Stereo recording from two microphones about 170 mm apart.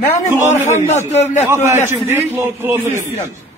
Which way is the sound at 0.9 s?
45° left (ahead or behind).